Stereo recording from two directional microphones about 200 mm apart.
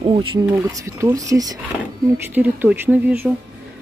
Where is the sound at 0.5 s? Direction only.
15° right (ahead or behind).